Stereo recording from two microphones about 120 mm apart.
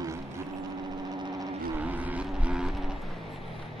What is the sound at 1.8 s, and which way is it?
Vehicle, 15° right (ahead or behind).